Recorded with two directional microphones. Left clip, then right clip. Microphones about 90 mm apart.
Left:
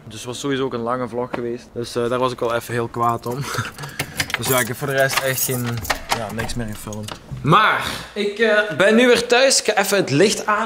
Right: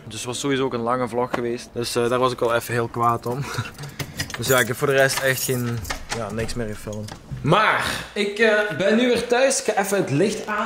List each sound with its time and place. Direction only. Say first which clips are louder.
0.3 s speech: even; centre (ahead or behind)
8.7 s a man's voice: left 6 dB; 30° left (ahead or behind)
9.3 s speech: left 4 dB; 10° left (ahead or behind)